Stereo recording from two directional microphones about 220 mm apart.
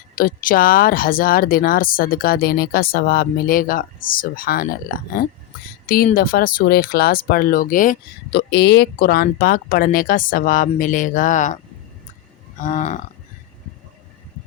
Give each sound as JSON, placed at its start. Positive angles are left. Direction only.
{"t": 0.2, "sound": "speech", "side_deg": 40}
{"t": 12.5, "sound": "speech", "side_deg": 35}